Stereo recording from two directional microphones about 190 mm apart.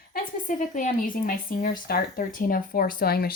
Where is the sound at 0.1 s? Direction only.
45° left (ahead or behind).